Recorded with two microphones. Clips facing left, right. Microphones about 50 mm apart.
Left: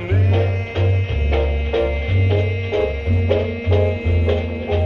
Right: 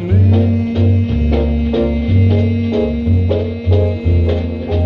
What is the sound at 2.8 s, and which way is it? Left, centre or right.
Music, left.